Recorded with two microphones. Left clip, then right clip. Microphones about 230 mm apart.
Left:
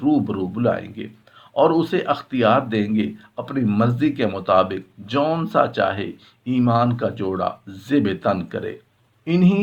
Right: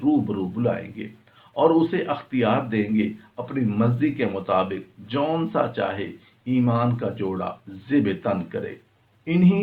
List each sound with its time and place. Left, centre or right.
0.0 s speech: left